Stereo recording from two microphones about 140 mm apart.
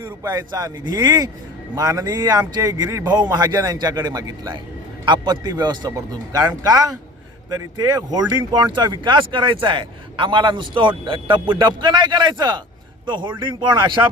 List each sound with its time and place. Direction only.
0.0 s speech: 25° right (ahead or behind)